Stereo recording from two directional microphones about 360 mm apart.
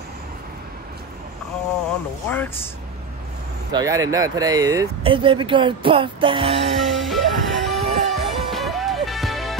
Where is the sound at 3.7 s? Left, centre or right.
Centre.